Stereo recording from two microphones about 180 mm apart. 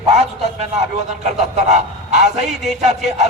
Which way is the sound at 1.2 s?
40° right (ahead or behind).